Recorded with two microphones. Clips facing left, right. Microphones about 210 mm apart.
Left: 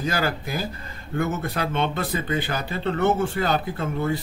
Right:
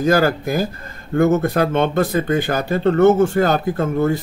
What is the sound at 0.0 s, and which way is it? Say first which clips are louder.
A man's voice: right 10 dB; 45° right (ahead or behind).